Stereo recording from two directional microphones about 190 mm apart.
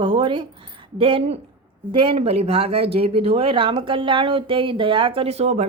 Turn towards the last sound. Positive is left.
turn(degrees=-35)  # may be behind; listen again after turning